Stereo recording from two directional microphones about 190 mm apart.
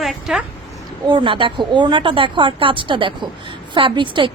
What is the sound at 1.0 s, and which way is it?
A woman's voice, 25° right (ahead or behind).